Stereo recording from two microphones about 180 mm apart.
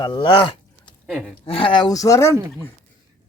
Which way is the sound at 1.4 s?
30° left (ahead or behind).